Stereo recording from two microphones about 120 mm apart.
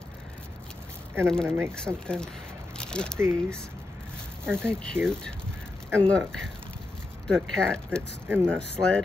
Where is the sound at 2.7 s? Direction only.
5° left (ahead or behind).